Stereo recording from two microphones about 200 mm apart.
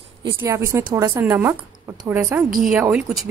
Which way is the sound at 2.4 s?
45° right (ahead or behind).